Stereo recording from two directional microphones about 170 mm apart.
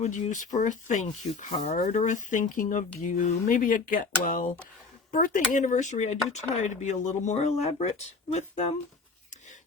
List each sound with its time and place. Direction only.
0.0 s speech: 45° left (ahead or behind)